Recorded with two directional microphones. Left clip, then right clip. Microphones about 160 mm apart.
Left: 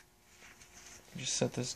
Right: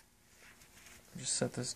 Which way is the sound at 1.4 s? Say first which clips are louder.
Left 3 dB; 20° left (ahead or behind).